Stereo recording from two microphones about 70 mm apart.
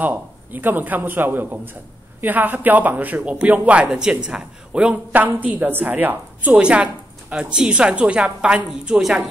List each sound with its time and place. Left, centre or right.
0.0 s speech: right
6.5 s a woman's voice: centre